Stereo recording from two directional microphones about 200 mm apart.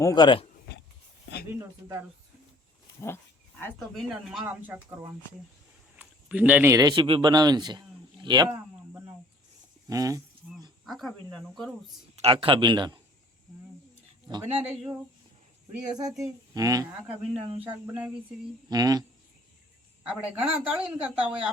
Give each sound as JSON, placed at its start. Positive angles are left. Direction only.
{"t": 0.0, "sound": "speech", "side_deg": 20}
{"t": 1.5, "sound": "speech", "side_deg": -15}
{"t": 3.6, "sound": "speech", "side_deg": 10}
{"t": 4.3, "sound": "speech", "side_deg": -5}
{"t": 6.0, "sound": "a man's voice", "side_deg": -5}
{"t": 8.5, "sound": "a sound", "side_deg": -10}
{"t": 9.9, "sound": "speech", "side_deg": -15}
{"t": 10.8, "sound": "speech", "side_deg": 0}
{"t": 12.1, "sound": "a man's voice", "side_deg": -30}
{"t": 14.5, "sound": "speech", "side_deg": 0}
{"t": 15.9, "sound": "speech", "side_deg": -20}
{"t": 17.8, "sound": "speech", "side_deg": -5}
{"t": 18.7, "sound": "a man's voice", "side_deg": -20}
{"t": 20.1, "sound": "speech", "side_deg": -5}